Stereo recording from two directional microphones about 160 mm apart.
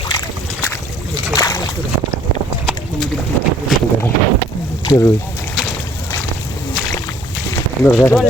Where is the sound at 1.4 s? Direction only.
20° left (ahead or behind).